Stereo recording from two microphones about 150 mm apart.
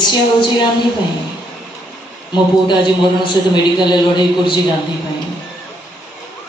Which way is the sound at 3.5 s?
30° left (ahead or behind).